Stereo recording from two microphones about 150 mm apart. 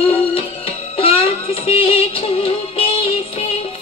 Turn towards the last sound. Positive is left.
turn(degrees=40)  # may be behind; listen again after turning